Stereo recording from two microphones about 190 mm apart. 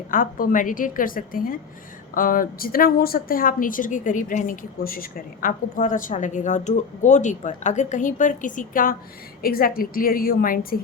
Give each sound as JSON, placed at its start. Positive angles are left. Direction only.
{"t": 0.1, "sound": "a woman's voice", "side_deg": 45}